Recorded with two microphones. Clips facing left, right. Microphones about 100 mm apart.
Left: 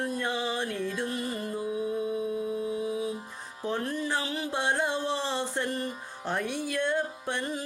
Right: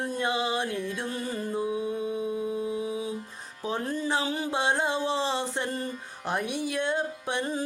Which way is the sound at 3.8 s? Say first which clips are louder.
Right 2 dB; 30° right (ahead or behind).